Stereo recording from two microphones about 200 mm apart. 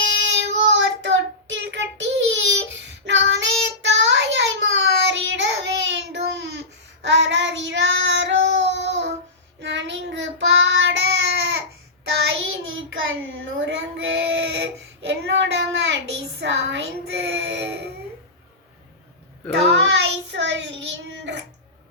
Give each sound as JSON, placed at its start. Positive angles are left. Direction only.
{"t": 0.0, "sound": "child singing", "side_deg": -65}
{"t": 12.2, "sound": "child singing", "side_deg": -75}
{"t": 19.9, "sound": "child singing", "side_deg": -65}